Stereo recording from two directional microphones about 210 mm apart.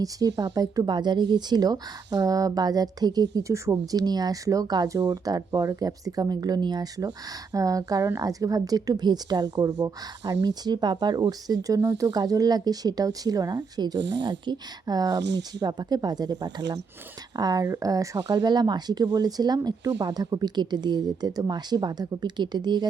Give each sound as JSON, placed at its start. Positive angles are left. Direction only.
{"t": 0.0, "sound": "speech", "side_deg": -15}
{"t": 15.2, "sound": "speech", "side_deg": -55}
{"t": 15.6, "sound": "speech", "side_deg": -20}